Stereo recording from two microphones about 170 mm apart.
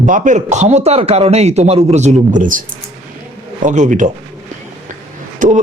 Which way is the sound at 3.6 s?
45° right (ahead or behind).